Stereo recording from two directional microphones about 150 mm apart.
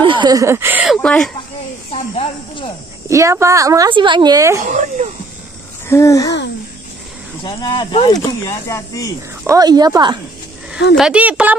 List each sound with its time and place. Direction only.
0.0 s speech: 30° right (ahead or behind); by 0.8 s 15° right (ahead or behind)
0.8 s speech: 5° left (ahead or behind)
1.9 s snake: 40° left (ahead or behind)
3.1 s a woman's voice: 20° right (ahead or behind)
3.9 s a woman's voice: 30° right (ahead or behind)
4.6 s speech: 55° right (ahead or behind)
5.9 s speech: 20° left (ahead or behind)
7.4 s speech: 30° left (ahead or behind)
9.5 s a woman's voice: 25° right (ahead or behind)
10.7 s a woman's voice: 5° right (ahead or behind)